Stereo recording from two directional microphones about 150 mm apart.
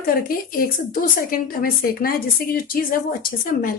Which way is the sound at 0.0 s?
80° left.